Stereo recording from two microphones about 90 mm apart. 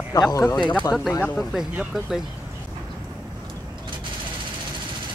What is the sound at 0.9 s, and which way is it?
Speech, 10° right (ahead or behind).